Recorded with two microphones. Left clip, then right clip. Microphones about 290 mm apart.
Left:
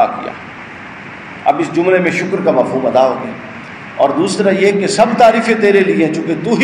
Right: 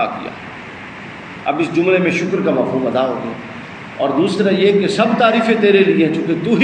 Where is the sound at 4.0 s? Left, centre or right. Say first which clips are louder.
Left 4 dB; left.